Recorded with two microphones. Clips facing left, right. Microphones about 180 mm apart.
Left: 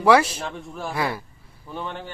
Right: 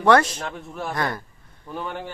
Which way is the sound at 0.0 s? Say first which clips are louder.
Even; 5° left (ahead or behind).